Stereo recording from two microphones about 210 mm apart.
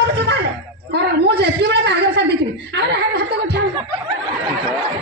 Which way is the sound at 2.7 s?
55° right (ahead or behind).